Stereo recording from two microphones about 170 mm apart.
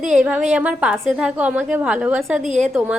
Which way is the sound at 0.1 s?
5° right (ahead or behind).